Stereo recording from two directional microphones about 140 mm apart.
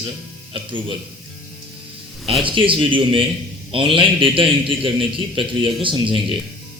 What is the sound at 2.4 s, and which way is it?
A man's voice, 35° right (ahead or behind).